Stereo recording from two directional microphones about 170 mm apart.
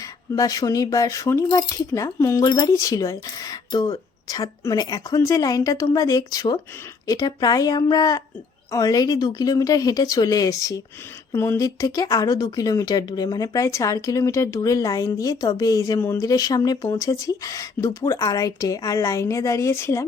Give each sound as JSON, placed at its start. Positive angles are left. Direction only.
{"t": 0.3, "sound": "speech", "side_deg": 20}